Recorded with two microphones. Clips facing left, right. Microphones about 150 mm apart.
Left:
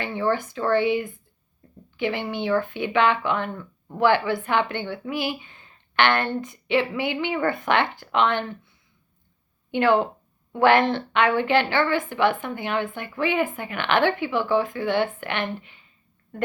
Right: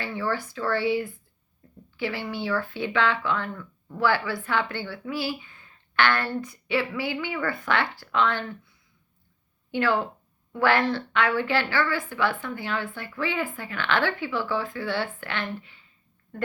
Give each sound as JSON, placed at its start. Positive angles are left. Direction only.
{"t": 0.0, "sound": "speech", "side_deg": 20}
{"t": 9.7, "sound": "speech", "side_deg": 20}